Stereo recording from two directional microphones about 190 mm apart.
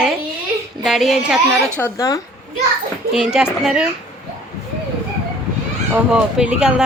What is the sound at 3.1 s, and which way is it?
Speech, 5° right (ahead or behind).